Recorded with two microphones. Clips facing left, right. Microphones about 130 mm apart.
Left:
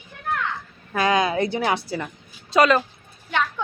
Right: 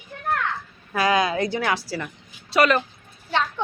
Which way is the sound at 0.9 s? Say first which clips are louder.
Even; 25° left (ahead or behind).